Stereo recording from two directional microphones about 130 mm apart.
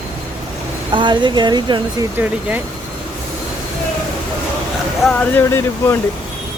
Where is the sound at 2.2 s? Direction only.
10° right (ahead or behind).